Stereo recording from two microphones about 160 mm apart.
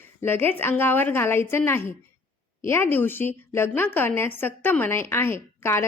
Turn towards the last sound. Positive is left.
turn(degrees=15)  # may be behind; listen again after turning